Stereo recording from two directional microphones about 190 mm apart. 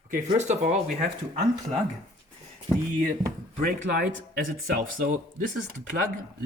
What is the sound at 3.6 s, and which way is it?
Speech, 50° right (ahead or behind).